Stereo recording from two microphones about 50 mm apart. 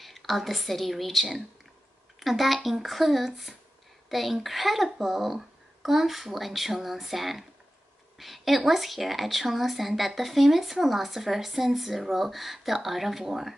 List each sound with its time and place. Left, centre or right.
0.0 s a woman's voice: centre